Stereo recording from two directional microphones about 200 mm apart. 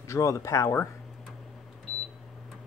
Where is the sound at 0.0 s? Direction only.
15° left (ahead or behind).